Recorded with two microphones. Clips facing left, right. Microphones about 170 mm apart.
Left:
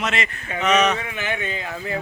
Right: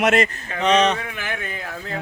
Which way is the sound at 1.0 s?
Centre (ahead or behind).